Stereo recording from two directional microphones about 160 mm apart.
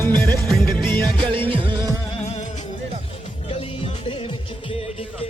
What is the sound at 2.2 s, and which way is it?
Music, 45° left (ahead or behind).